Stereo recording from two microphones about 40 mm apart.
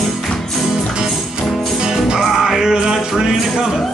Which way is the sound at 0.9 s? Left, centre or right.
Centre.